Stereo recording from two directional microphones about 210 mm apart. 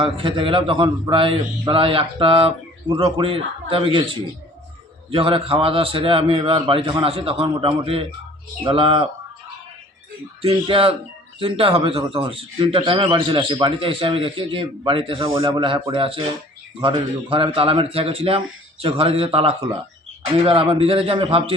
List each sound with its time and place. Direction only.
0.0 s a man's voice: 25° right (ahead or behind)
10.4 s a man's voice: 25° right (ahead or behind)